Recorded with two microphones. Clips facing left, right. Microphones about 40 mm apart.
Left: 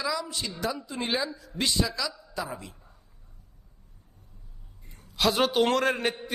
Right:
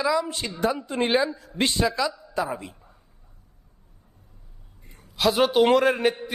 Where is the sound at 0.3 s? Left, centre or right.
Right.